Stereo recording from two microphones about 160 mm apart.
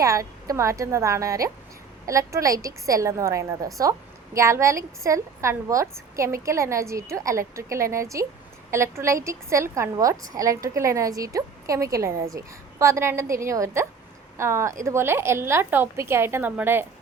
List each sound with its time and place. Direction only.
0.0 s a woman's voice: 20° right (ahead or behind)